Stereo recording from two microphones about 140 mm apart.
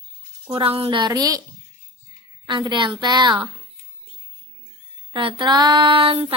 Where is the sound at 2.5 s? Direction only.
35° right (ahead or behind).